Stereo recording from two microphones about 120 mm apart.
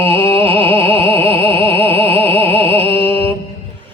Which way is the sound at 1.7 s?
20° left (ahead or behind).